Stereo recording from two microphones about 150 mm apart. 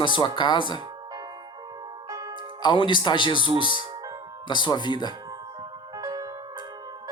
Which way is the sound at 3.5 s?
35° right (ahead or behind).